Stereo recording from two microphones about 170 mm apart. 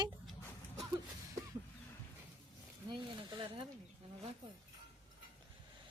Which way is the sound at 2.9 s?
30° right (ahead or behind).